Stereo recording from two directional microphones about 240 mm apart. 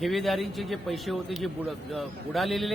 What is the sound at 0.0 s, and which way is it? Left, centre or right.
A man's voice, centre.